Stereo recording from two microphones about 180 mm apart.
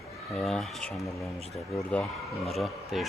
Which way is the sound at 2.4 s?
Centre (ahead or behind).